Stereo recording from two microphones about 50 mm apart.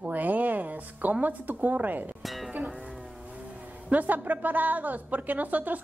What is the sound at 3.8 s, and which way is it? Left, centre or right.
A woman's voice, right.